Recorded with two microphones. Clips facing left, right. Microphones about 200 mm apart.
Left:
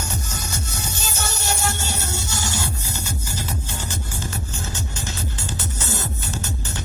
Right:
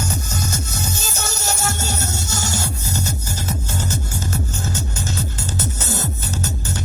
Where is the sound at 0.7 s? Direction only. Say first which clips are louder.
Right 3 dB; 45° right (ahead or behind).